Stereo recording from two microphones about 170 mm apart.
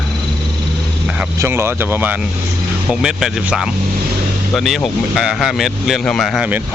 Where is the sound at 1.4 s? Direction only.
15° right (ahead or behind).